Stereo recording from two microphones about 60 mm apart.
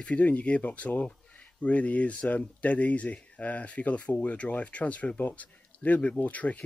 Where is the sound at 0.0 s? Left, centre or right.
Left.